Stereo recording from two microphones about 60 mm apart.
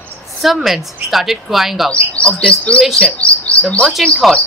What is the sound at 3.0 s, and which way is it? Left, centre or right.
Chirp, left.